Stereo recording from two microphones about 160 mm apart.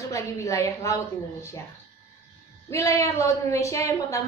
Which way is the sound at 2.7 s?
20° left (ahead or behind).